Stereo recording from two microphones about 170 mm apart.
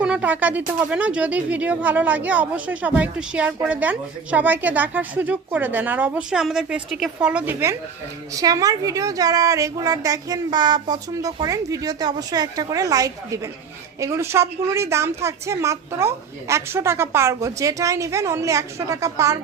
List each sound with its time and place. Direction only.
0.0 s a woman's voice: 10° right (ahead or behind)